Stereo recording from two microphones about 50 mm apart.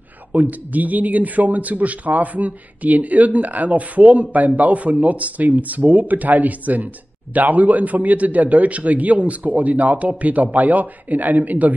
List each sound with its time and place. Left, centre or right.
0.3 s a man's voice: right